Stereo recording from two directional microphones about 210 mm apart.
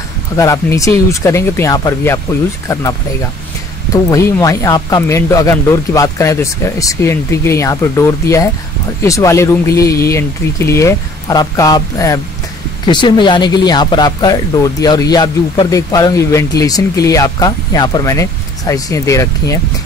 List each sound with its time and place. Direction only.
0.4 s speech: 15° left (ahead or behind)